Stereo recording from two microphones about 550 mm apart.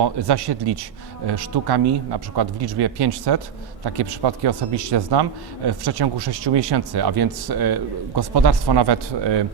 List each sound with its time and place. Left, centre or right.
0.0 s a man's voice: right